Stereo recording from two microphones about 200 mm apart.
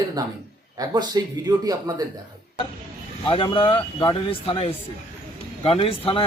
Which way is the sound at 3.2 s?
25° left (ahead or behind).